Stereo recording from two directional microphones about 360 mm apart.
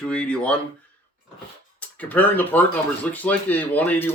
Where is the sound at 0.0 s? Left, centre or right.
Centre.